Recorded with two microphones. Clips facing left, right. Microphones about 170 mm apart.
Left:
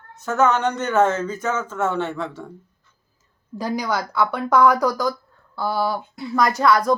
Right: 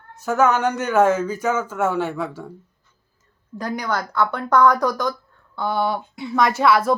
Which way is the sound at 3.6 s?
5° left (ahead or behind).